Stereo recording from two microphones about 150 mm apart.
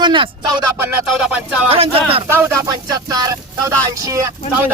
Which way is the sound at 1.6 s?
40° right (ahead or behind).